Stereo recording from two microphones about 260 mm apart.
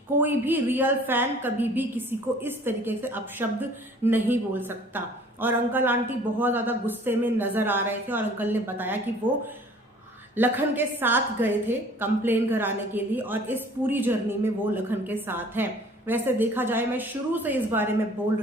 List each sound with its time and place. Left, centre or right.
0.2 s a woman's voice: centre
9.2 s speech: centre
10.3 s a woman's voice: centre